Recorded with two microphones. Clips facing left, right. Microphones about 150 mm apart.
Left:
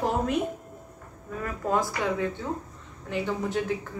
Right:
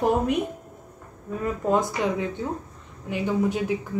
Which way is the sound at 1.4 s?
20° right (ahead or behind).